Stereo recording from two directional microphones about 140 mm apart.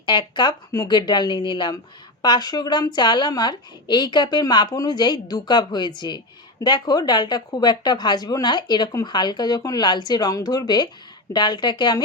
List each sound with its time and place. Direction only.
0.0 s a woman's voice: 30° left (ahead or behind)